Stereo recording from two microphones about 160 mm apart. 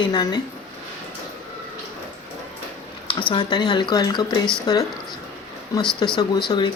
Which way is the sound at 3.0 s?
30° left (ahead or behind).